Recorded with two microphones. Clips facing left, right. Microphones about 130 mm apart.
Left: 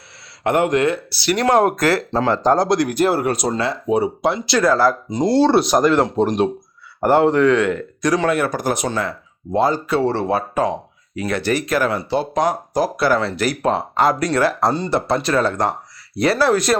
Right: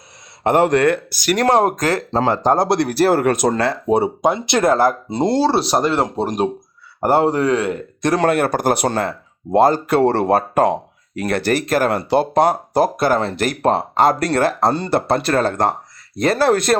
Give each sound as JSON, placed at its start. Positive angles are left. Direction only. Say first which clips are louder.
{"t": 0.4, "sound": "speech", "louder": "right 2 dB", "side_deg": -35}
{"t": 0.9, "sound": "speech", "louder": "right 2 dB", "side_deg": -50}
{"t": 1.5, "sound": "speech", "louder": "left 1 dB", "side_deg": -25}
{"t": 3.8, "sound": "speech", "louder": "right 1 dB", "side_deg": -35}
{"t": 4.2, "sound": "speech", "louder": "right 1 dB", "side_deg": -20}
{"t": 8.3, "sound": "speech", "louder": "right 3 dB", "side_deg": -60}